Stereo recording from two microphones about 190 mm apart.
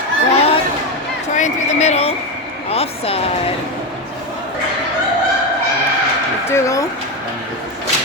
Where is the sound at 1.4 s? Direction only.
35° left (ahead or behind).